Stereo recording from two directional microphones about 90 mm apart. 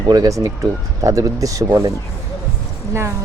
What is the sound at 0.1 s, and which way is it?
Speech, 40° right (ahead or behind).